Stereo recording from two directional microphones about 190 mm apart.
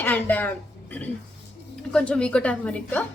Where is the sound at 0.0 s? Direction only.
10° left (ahead or behind).